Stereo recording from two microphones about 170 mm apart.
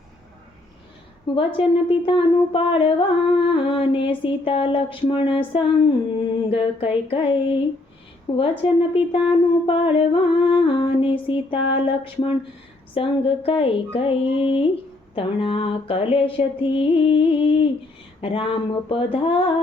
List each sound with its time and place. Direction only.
1.4 s speech: 30° left (ahead or behind)